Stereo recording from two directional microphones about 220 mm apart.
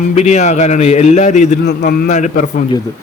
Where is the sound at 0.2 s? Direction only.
30° left (ahead or behind).